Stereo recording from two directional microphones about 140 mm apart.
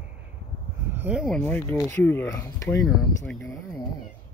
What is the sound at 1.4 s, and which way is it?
Speech, 15° left (ahead or behind).